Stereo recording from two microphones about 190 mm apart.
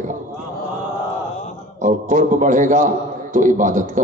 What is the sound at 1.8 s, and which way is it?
A man's voice, 40° right (ahead or behind).